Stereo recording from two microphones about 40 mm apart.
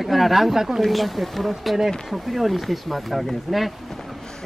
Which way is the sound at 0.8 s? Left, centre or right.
Centre.